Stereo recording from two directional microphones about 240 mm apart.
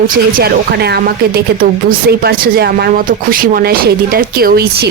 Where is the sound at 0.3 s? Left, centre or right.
Right.